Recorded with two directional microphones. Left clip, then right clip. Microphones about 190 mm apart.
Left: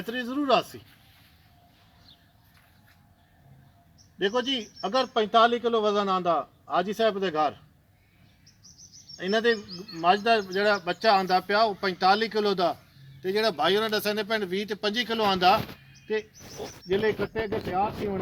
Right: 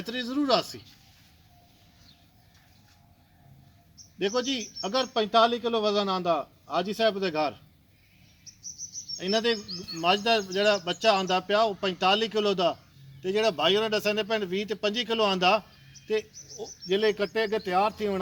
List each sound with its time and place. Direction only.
0.0 s a man's voice: 20° right (ahead or behind)
4.2 s a man's voice: 15° right (ahead or behind)
8.5 s cricket: 65° right (ahead or behind)
9.1 s a man's voice: 20° right (ahead or behind); by 16.2 s 55° right (ahead or behind)
16.8 s speech: 70° right (ahead or behind)